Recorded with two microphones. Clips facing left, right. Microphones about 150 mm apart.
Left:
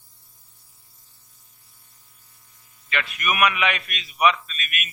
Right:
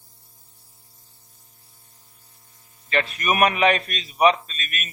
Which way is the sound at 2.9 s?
35° right (ahead or behind).